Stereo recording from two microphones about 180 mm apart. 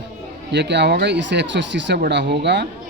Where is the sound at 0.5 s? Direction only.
70° right (ahead or behind).